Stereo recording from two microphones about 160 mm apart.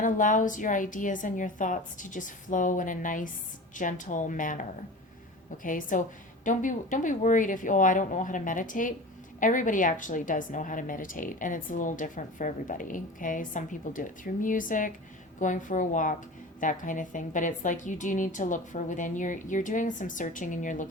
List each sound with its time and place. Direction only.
0.0 s a woman's voice: 55° left (ahead or behind)
5.6 s a woman's voice: 55° left (ahead or behind)